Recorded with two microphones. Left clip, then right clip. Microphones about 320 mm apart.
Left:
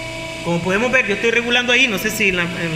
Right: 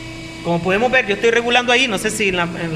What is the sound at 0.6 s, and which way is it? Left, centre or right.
Speech, right.